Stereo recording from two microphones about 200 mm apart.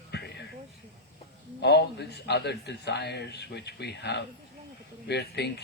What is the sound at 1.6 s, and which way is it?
A man's voice, 55° left (ahead or behind).